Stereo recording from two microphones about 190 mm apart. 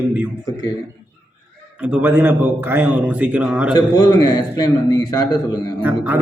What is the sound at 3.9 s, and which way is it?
A man's voice, 20° left (ahead or behind).